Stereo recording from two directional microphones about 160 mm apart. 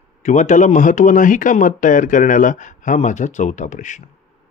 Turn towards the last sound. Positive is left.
turn(degrees=50)  # may be behind; listen again after turning